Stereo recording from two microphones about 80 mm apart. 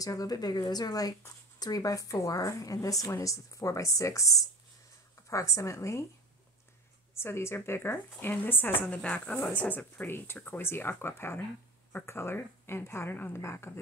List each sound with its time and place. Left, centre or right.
0.0 s a woman's voice: left
7.2 s speech: left